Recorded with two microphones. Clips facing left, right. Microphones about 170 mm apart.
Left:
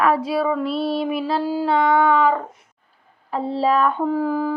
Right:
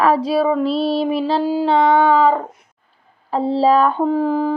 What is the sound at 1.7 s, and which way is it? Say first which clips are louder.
Speech: right 3 dB; 25° right (ahead or behind).